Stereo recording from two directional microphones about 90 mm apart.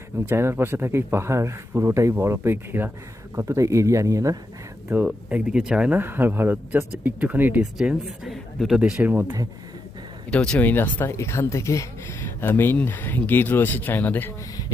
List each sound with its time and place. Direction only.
0.3 s speech: 25° right (ahead or behind)
3.3 s a man's voice: 35° right (ahead or behind)
5.0 s speech: 10° right (ahead or behind)
6.0 s speech: 25° right (ahead or behind)
7.6 s speech: 5° right (ahead or behind)
8.8 s speech: 15° right (ahead or behind)
9.2 s speech: 45° right (ahead or behind)
10.2 s speech: 10° left (ahead or behind)